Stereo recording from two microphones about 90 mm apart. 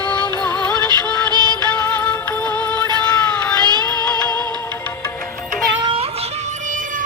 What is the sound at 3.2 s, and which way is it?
Cat, 10° left (ahead or behind).